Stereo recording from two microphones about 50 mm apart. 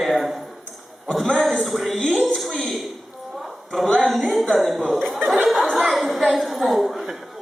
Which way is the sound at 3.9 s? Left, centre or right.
Centre.